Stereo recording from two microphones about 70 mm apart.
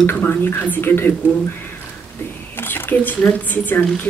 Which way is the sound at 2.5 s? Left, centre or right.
Left.